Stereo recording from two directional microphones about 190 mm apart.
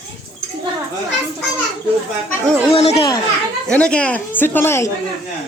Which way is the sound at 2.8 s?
35° left (ahead or behind).